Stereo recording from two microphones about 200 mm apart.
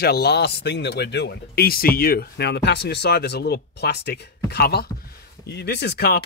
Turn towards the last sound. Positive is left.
turn(degrees=55)  # may be behind; listen again after turning